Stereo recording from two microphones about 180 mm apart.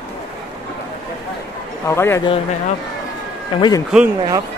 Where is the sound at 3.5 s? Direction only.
25° left (ahead or behind).